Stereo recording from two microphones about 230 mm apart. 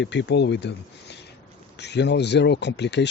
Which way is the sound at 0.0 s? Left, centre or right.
Left.